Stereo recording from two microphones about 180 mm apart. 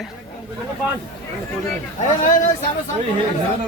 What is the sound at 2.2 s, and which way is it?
Speech, 45° left (ahead or behind).